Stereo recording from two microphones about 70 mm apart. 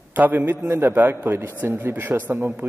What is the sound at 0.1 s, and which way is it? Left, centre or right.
A man's voice, right.